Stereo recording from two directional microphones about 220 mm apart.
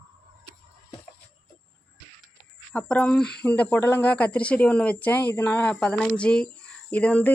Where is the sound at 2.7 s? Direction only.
5° left (ahead or behind).